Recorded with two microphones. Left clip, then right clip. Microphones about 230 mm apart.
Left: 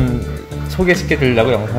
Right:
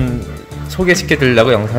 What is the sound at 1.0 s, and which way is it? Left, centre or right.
Speech, centre.